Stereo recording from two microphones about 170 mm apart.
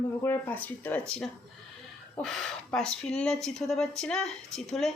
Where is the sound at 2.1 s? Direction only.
Centre (ahead or behind).